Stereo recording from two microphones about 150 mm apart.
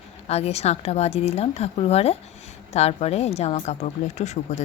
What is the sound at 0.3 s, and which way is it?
A woman's voice, 45° left (ahead or behind).